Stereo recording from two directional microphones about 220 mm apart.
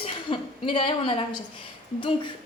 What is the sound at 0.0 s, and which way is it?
A woman's voice, 25° left (ahead or behind).